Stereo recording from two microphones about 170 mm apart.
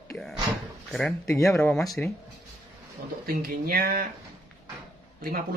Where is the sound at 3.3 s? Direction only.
60° right (ahead or behind).